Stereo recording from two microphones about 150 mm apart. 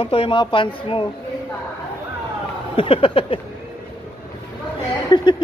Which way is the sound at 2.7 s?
35° left (ahead or behind).